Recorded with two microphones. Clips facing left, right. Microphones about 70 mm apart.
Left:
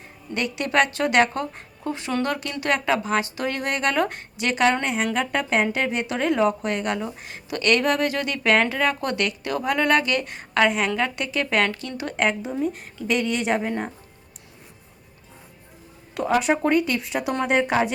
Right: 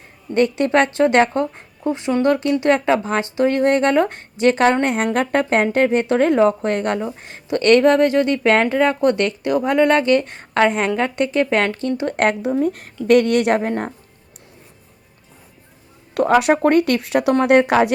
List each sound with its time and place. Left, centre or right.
0.3 s speech: right
12.1 s speech: right
13.6 s speech: right
16.1 s speech: right
17.4 s speech: right